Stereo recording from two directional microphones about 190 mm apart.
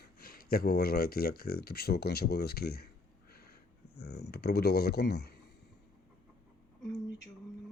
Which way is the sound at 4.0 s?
60° left (ahead or behind).